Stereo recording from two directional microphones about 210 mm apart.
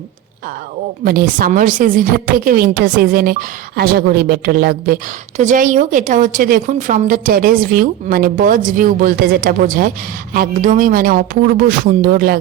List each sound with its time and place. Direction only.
1.0 s a woman's voice: 45° right (ahead or behind)